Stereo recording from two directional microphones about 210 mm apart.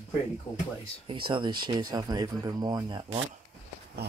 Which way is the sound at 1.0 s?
25° right (ahead or behind).